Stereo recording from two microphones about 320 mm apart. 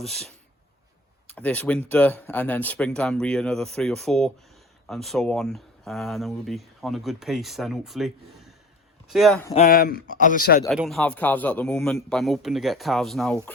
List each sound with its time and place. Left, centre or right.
0.0 s speech: centre
1.3 s speech: centre
9.6 s speech: left
10.6 s speech: centre